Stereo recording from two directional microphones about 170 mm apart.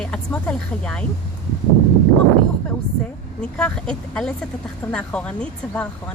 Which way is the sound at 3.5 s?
5° left (ahead or behind).